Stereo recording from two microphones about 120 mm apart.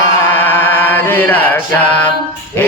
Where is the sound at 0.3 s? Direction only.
15° left (ahead or behind).